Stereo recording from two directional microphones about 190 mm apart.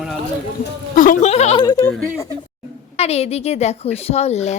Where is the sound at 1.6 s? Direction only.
20° left (ahead or behind).